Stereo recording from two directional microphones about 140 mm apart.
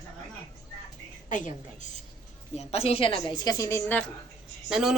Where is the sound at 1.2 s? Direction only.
70° left (ahead or behind).